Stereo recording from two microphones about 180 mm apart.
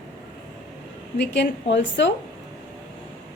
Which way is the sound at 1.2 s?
75° left (ahead or behind).